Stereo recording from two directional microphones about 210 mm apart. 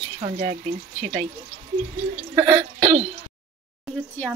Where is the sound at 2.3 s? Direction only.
20° right (ahead or behind).